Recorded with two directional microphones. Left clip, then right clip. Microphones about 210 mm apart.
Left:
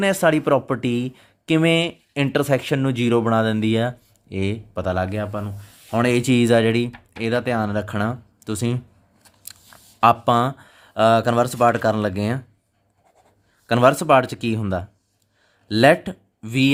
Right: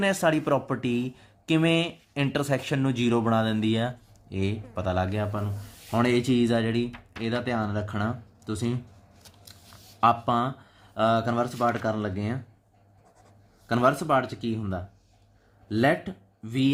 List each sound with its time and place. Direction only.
0.0 s speech: 35° left (ahead or behind)
13.7 s speech: 50° left (ahead or behind)